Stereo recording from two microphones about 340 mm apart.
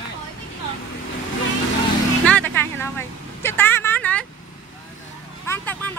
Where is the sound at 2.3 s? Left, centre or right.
Centre.